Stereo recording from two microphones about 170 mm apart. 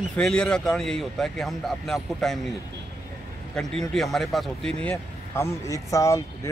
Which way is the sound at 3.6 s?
5° left (ahead or behind).